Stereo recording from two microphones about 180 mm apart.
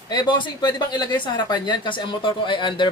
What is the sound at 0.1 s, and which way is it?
Speech, 25° left (ahead or behind).